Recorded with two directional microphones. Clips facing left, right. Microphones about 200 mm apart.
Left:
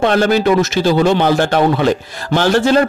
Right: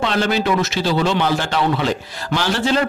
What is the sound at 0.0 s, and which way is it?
A man's voice, 50° left (ahead or behind).